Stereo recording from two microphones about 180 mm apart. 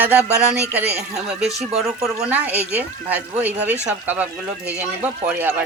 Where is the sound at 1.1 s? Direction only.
Centre (ahead or behind).